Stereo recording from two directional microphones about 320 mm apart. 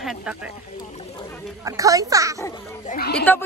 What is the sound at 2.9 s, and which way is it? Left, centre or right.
Speech, left.